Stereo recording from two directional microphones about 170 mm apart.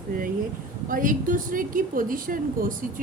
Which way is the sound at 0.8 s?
50° right (ahead or behind).